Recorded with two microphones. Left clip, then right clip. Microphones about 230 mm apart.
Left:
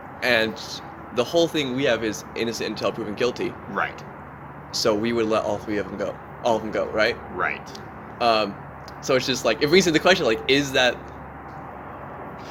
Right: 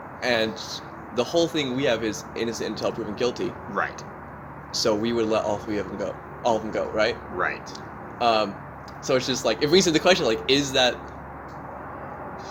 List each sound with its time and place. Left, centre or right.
0.2 s speech: centre